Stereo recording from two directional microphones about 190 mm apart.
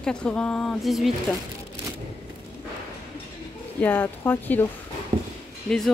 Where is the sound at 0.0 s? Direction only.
5° left (ahead or behind).